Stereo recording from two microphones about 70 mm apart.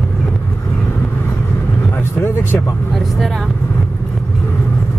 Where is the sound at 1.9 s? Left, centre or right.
Left.